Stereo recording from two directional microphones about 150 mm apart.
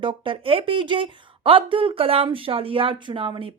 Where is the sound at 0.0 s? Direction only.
35° right (ahead or behind).